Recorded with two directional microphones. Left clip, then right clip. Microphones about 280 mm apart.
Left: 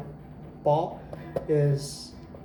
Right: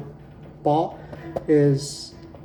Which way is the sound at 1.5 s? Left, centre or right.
Right.